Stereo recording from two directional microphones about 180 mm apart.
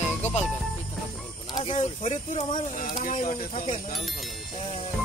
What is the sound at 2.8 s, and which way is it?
Speech, 50° left (ahead or behind).